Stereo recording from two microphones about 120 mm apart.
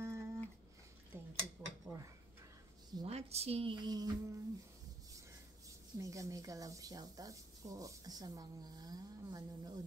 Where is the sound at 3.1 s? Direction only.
60° right (ahead or behind).